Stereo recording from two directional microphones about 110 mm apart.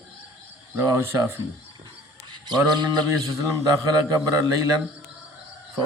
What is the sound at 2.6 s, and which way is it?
Speech, 40° right (ahead or behind).